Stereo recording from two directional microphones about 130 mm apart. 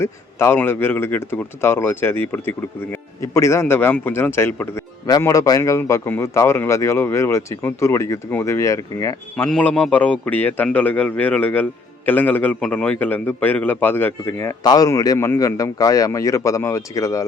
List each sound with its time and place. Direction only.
0.0 s a man's voice: 20° left (ahead or behind)
9.3 s a man's voice: 10° left (ahead or behind); by 17.2 s 25° left (ahead or behind)